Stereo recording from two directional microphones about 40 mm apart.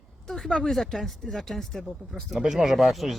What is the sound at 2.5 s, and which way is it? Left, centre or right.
Speech, centre.